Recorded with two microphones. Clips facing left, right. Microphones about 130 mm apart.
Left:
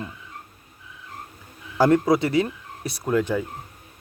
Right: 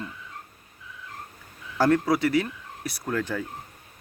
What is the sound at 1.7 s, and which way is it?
A man's voice, 15° left (ahead or behind).